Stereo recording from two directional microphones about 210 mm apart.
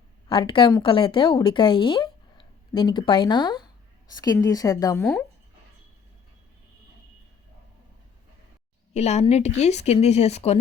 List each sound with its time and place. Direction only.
0.3 s a woman's voice: 25° left (ahead or behind)
8.9 s a woman's voice: 30° left (ahead or behind)